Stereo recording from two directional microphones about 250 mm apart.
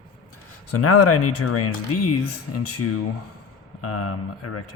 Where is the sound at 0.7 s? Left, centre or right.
Left.